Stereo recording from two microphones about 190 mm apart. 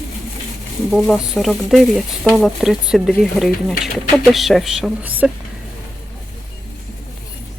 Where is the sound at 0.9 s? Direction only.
Centre (ahead or behind).